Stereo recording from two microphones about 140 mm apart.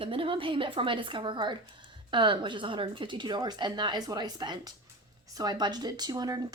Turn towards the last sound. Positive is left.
turn(degrees=-30)  # may be behind; listen again after turning